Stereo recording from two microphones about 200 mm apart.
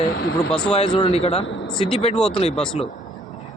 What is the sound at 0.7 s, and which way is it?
A man's voice, 30° left (ahead or behind).